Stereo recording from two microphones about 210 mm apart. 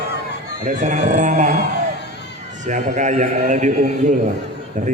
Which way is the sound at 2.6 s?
35° right (ahead or behind).